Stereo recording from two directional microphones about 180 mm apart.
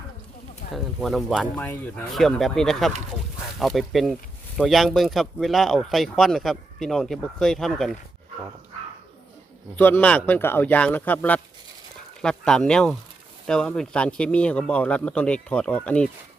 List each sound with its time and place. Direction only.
0.7 s speech: centre (ahead or behind)
9.7 s speech: 10° left (ahead or behind)